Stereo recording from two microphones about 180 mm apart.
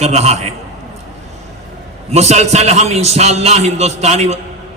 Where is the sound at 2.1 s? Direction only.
35° right (ahead or behind).